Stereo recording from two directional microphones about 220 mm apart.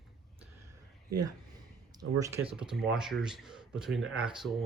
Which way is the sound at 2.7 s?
Centre (ahead or behind).